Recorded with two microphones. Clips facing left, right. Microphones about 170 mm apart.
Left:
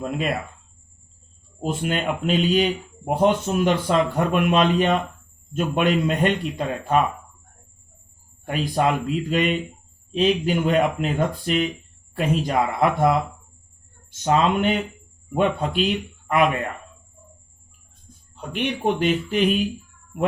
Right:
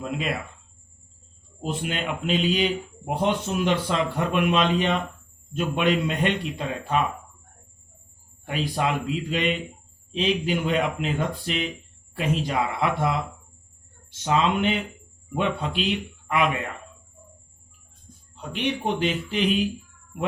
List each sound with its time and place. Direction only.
0.0 s a man's voice: 45° left (ahead or behind)
1.6 s a man's voice: 45° left (ahead or behind)
8.4 s a man's voice: 45° left (ahead or behind)
18.5 s a man's voice: 50° left (ahead or behind)